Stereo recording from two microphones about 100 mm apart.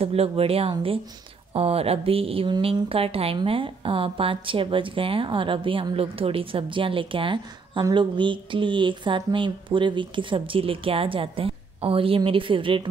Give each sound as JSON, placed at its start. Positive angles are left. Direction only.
{"t": 0.0, "sound": "speech", "side_deg": -85}
{"t": 5.9, "sound": "speech", "side_deg": -70}
{"t": 12.3, "sound": "speech", "side_deg": -60}